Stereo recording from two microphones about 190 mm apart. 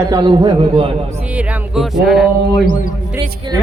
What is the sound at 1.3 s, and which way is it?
A man's voice, 5° right (ahead or behind).